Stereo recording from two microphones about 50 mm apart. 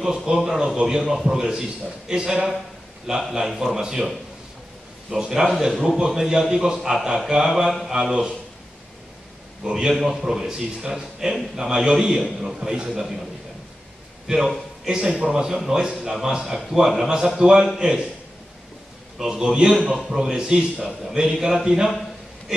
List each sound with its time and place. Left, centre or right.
0.0 s a man's voice: centre
5.1 s a man's voice: centre
9.7 s a man's voice: centre
12.6 s a man's voice: centre
14.2 s a man's voice: centre
19.1 s a man's voice: centre